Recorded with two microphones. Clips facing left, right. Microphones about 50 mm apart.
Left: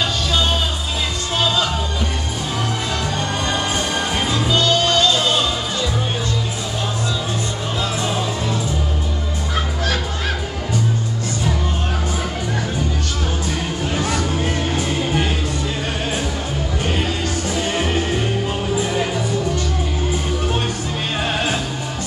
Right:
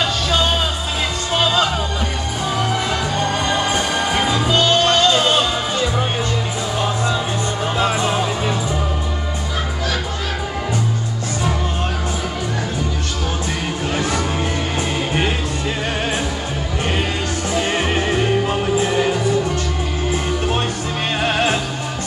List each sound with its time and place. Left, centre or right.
1.4 s music: right
3.5 s music: centre
7.8 s music: right
17.6 s music: right
21.2 s music: right